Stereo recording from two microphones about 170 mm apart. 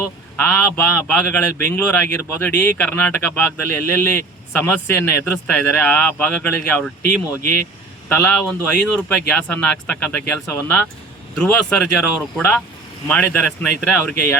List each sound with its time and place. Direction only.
0.0 s speech: 10° left (ahead or behind)
7.4 s speech: 50° right (ahead or behind)
8.1 s speech: 5° left (ahead or behind)